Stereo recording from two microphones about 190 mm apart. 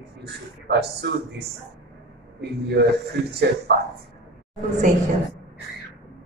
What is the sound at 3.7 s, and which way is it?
Speech, 60° right (ahead or behind).